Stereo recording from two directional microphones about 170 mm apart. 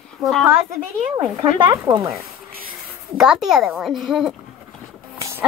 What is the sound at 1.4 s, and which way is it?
Speech, 25° right (ahead or behind).